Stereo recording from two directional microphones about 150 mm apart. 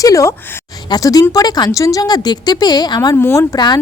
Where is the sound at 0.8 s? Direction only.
25° left (ahead or behind).